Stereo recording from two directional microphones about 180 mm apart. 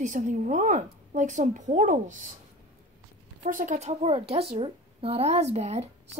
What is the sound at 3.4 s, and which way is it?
A woman's voice, 45° right (ahead or behind).